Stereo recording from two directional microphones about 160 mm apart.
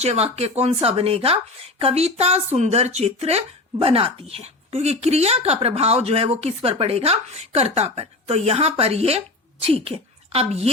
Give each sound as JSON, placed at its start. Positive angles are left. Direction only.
{"t": 0.0, "sound": "speech", "side_deg": -40}